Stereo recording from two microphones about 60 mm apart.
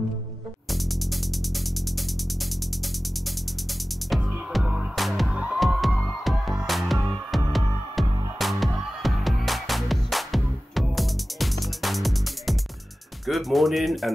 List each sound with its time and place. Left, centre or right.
4.9 s music: centre
5.3 s music: centre
5.6 s music: centre
13.3 s speech: centre